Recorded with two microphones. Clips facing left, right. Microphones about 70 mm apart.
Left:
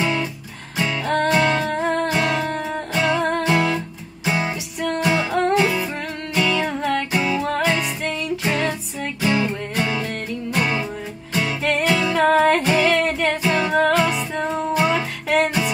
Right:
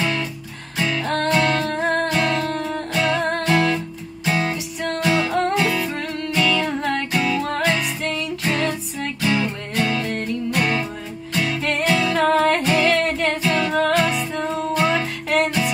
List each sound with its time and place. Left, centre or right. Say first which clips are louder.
0.0 s music: left 1 dB; centre
7.5 s music: even; centre
8.1 s music: left 1 dB; centre
12.9 s music: even; centre
13.5 s music: left 2 dB; centre